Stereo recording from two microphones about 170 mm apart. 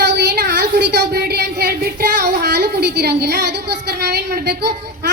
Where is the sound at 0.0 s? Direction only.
80° right.